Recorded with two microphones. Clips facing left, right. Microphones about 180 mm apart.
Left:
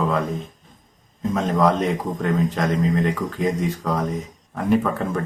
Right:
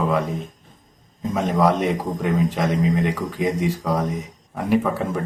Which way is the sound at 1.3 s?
10° right (ahead or behind).